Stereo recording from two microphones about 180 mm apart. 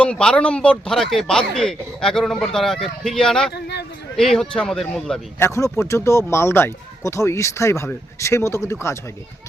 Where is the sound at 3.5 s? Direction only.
65° left (ahead or behind).